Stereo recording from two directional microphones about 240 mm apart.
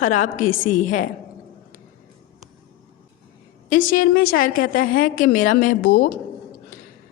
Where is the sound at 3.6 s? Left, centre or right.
Left.